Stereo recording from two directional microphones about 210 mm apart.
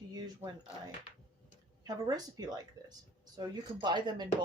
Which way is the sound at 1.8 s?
20° right (ahead or behind).